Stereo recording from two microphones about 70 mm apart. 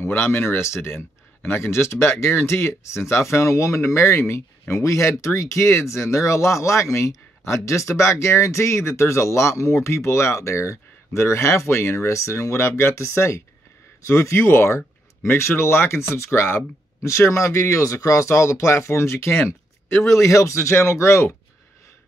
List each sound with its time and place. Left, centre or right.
0.0 s speech: left